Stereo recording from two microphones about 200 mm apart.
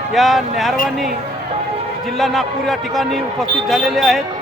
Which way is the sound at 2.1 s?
Centre (ahead or behind).